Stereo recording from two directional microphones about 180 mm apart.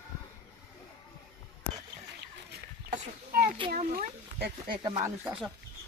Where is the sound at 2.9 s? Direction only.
50° right (ahead or behind).